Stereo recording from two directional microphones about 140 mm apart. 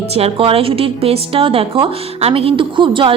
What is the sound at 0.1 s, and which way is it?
A woman's voice, 45° right (ahead or behind).